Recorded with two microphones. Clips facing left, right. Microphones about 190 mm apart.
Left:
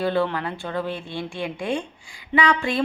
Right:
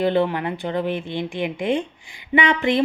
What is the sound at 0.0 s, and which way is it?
A woman's voice, 20° right (ahead or behind).